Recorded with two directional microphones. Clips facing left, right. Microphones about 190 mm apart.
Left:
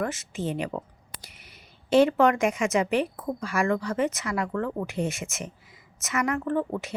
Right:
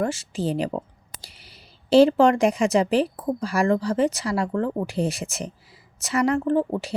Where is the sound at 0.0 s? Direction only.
30° right (ahead or behind).